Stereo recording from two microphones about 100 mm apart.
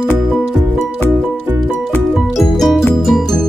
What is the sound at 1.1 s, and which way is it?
Music, 20° right (ahead or behind).